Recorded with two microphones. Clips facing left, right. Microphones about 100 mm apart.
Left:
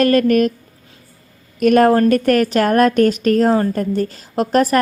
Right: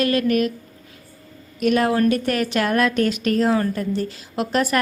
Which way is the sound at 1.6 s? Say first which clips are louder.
Left 7 dB; 50° left (ahead or behind).